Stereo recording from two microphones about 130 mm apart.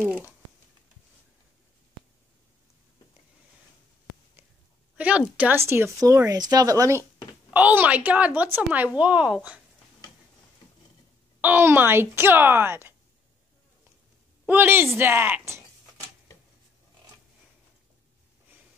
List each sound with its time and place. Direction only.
4.9 s a sound: 10° right (ahead or behind)
5.4 s speech: 20° right (ahead or behind)
7.5 s a woman's voice: 15° right (ahead or behind)
11.4 s a woman's voice: 15° right (ahead or behind)
14.4 s a woman's voice: 15° right (ahead or behind)